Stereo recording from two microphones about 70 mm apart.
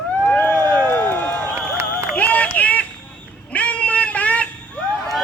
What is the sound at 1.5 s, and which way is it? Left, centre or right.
Crowd, right.